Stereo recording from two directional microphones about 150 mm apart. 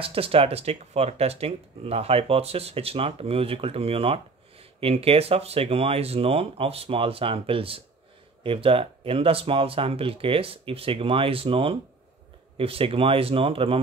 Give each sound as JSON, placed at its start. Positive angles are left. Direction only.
{"t": 0.0, "sound": "speech", "side_deg": -40}